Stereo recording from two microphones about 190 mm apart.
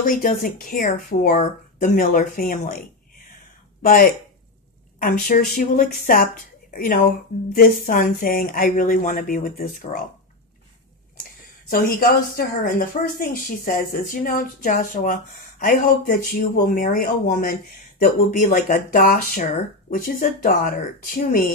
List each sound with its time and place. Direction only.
0.0 s speech: 45° left (ahead or behind)
3.8 s speech: 50° left (ahead or behind)
11.7 s speech: 50° left (ahead or behind)